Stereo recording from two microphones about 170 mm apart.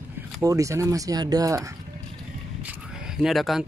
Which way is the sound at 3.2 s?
Centre (ahead or behind).